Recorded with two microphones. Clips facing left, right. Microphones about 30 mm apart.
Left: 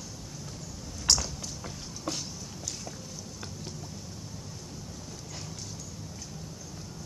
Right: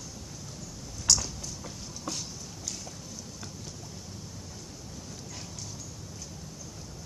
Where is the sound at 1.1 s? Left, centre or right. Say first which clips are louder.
Even; left.